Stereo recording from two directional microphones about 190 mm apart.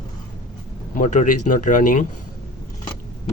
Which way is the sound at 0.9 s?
40° left (ahead or behind).